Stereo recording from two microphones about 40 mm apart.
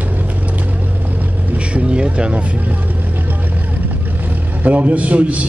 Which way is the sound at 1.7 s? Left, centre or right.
Right.